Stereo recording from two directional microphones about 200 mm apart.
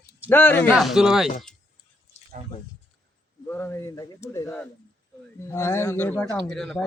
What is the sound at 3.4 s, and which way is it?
Speech, 10° left (ahead or behind).